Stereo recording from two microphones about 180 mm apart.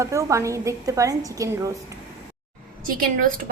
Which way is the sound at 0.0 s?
15° right (ahead or behind).